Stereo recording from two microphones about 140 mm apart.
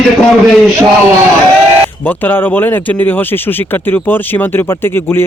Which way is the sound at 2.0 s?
15° left (ahead or behind).